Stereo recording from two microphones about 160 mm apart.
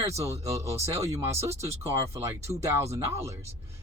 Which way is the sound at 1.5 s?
20° right (ahead or behind).